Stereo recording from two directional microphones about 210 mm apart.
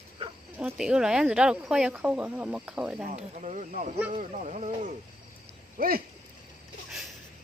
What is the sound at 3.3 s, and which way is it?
Speech, 35° right (ahead or behind).